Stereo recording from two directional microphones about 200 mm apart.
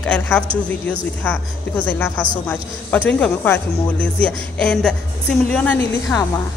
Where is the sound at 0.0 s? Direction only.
5° left (ahead or behind).